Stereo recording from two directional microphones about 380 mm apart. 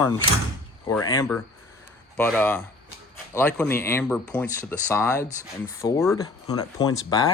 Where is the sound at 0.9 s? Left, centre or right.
Centre.